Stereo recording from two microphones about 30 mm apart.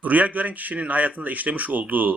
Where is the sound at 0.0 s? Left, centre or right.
Right.